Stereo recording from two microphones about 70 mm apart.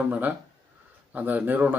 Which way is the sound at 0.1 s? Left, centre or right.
Right.